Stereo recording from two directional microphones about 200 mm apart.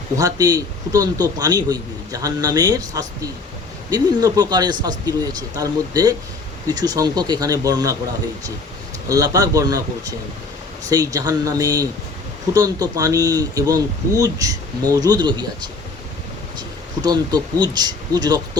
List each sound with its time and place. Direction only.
0.2 s a man's voice: 15° right (ahead or behind)
9.0 s speech: 15° right (ahead or behind)
16.6 s speech: 20° right (ahead or behind)